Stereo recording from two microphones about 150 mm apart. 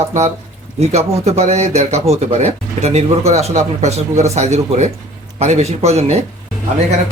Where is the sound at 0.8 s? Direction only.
45° right (ahead or behind).